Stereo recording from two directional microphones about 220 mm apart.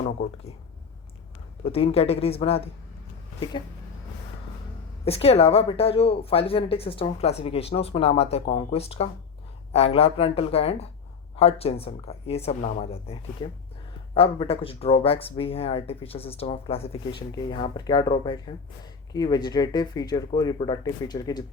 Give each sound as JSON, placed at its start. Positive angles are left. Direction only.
{"t": 1.7, "sound": "speech", "side_deg": 25}
{"t": 5.0, "sound": "speech", "side_deg": 25}